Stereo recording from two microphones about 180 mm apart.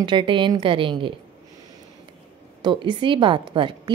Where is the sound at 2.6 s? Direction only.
25° right (ahead or behind).